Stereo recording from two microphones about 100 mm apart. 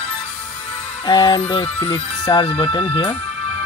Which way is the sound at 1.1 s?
45° left (ahead or behind).